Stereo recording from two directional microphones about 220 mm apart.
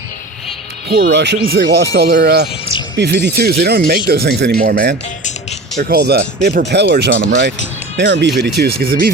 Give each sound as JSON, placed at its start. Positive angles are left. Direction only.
{"t": 0.9, "sound": "speech", "side_deg": -50}